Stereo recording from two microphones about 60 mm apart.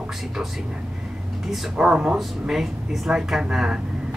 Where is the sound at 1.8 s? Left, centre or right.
Centre.